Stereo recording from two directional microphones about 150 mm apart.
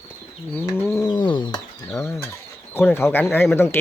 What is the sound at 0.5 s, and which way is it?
Bird, 20° left (ahead or behind).